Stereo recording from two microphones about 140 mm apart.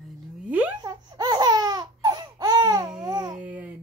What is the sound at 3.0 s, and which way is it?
Babbling, 25° right (ahead or behind).